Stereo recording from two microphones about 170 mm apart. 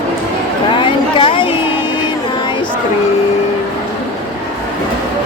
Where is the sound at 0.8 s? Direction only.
30° left (ahead or behind).